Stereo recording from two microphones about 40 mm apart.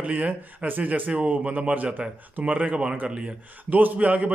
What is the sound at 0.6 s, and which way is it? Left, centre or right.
Speech, right.